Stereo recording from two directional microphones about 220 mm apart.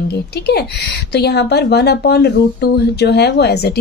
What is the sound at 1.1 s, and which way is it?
A woman's voice, 50° left (ahead or behind).